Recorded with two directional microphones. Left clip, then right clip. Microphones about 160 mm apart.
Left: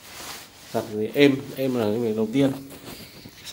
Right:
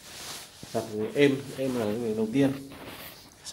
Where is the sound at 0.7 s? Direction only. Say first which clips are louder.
Left 4 dB; 20° left (ahead or behind).